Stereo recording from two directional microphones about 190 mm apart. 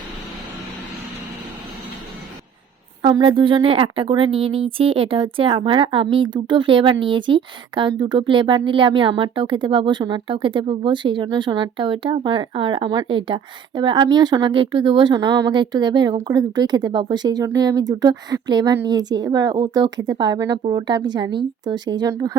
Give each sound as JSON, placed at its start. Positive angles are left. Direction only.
{"t": 3.0, "sound": "a woman's voice", "side_deg": -25}